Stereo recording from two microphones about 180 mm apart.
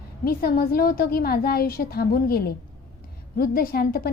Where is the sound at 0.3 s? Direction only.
55° left (ahead or behind).